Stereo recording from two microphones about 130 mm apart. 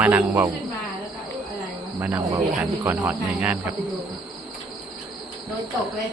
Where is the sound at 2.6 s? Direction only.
10° right (ahead or behind).